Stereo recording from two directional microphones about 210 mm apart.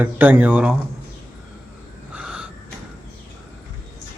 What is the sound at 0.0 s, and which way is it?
Speech, 10° right (ahead or behind).